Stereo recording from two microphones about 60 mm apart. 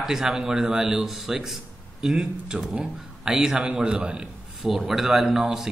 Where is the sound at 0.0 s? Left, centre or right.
Centre.